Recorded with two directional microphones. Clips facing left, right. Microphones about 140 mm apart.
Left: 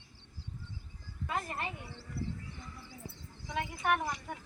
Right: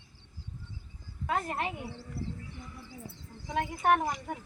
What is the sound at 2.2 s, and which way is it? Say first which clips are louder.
Music: even; 40° right (ahead or behind).